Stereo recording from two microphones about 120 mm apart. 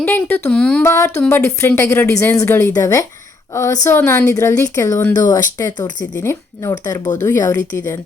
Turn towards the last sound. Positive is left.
turn(degrees=30)  # may be behind; listen again after turning